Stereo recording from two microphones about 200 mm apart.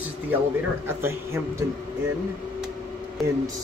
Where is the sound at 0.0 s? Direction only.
10° right (ahead or behind).